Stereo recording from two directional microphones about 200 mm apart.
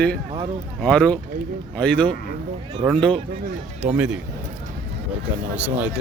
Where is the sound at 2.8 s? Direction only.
15° right (ahead or behind).